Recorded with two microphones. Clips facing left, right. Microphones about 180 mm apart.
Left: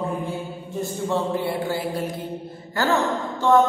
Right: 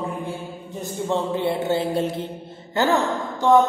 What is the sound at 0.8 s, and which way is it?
A woman's voice, 20° right (ahead or behind).